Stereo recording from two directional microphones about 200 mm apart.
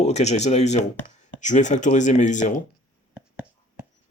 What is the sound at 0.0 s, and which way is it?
Speech, 35° left (ahead or behind).